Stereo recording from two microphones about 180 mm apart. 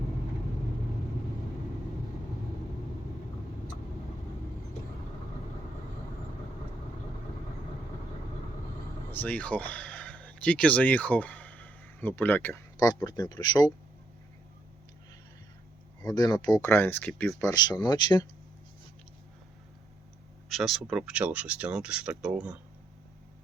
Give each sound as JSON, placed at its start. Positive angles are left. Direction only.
{"t": 9.1, "sound": "speech", "side_deg": 10}
{"t": 16.0, "sound": "speech", "side_deg": 20}
{"t": 16.6, "sound": "speech", "side_deg": 10}
{"t": 20.5, "sound": "speech", "side_deg": 0}